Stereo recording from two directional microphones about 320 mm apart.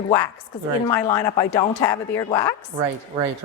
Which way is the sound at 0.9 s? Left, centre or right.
Centre.